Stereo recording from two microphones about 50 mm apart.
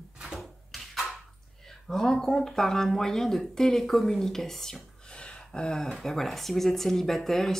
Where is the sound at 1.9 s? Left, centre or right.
Centre.